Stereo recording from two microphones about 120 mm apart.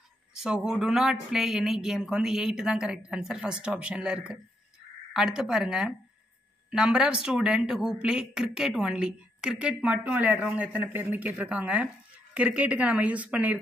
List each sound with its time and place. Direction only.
0.3 s a woman's voice: 5° right (ahead or behind)